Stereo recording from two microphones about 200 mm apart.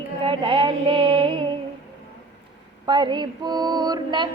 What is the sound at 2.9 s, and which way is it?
Female singing, 25° right (ahead or behind).